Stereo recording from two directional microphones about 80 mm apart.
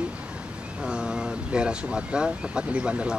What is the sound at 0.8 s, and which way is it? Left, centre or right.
Speech, centre.